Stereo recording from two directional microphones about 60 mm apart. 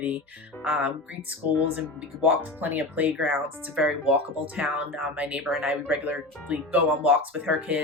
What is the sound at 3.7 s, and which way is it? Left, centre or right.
Speech, centre.